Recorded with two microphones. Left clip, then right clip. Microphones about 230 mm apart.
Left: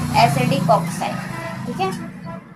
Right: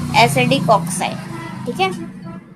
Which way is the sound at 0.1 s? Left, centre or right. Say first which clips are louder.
Right 3 dB; right.